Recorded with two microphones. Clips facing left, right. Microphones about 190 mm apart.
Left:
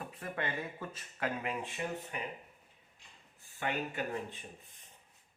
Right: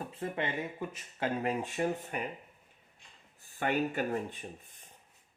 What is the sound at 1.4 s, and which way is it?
Speech, 40° right (ahead or behind).